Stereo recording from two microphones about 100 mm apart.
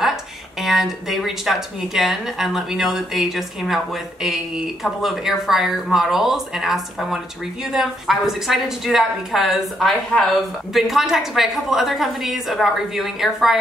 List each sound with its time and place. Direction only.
0.0 s speech: 5° right (ahead or behind)